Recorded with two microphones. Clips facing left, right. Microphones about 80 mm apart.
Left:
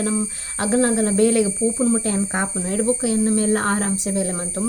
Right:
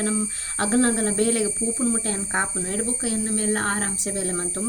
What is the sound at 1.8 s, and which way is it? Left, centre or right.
Speech, left.